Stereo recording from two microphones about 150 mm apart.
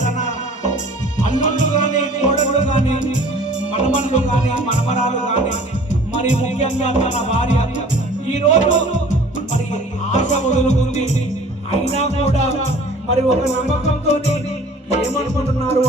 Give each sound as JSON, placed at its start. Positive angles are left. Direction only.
{"t": 1.2, "sound": "music", "side_deg": 60}
{"t": 10.1, "sound": "music", "side_deg": 50}
{"t": 15.6, "sound": "music", "side_deg": 45}